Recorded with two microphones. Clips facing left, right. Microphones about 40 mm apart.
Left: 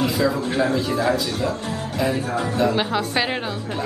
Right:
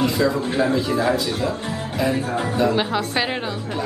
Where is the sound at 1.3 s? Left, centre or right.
Centre.